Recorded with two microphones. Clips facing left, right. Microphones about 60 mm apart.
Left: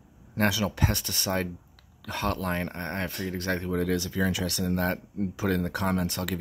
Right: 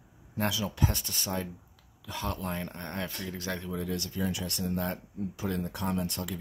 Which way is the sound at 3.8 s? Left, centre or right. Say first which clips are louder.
Left 4 dB; left.